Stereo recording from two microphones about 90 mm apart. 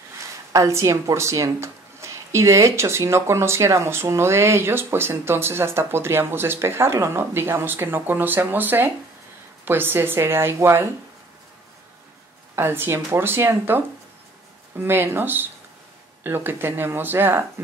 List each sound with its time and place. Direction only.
0.5 s speech: 35° right (ahead or behind)
12.5 s speech: 25° right (ahead or behind)